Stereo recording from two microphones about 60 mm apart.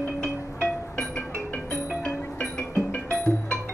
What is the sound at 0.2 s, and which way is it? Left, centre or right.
Music, centre.